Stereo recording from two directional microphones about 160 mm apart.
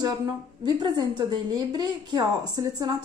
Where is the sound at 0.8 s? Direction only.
30° right (ahead or behind).